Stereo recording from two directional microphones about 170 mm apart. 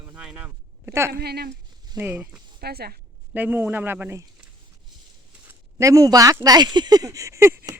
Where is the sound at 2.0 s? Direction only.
10° right (ahead or behind).